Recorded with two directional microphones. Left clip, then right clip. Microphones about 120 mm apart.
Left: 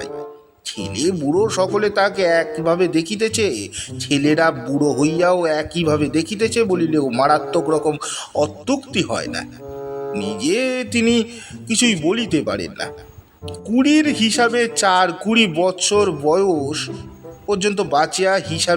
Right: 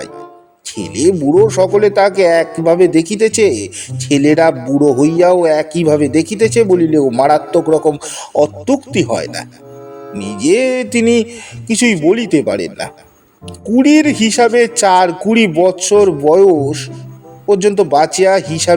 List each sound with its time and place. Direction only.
0.7 s speech: 25° right (ahead or behind)
4.7 s music: centre (ahead or behind)
4.9 s speech: 25° right (ahead or behind)
9.8 s music: centre (ahead or behind)
10.2 s speech: 25° right (ahead or behind)